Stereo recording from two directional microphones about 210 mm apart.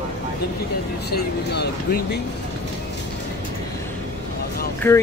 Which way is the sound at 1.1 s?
50° left (ahead or behind).